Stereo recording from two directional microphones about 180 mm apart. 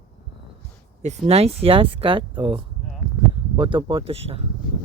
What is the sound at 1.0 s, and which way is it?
Speech, 35° right (ahead or behind).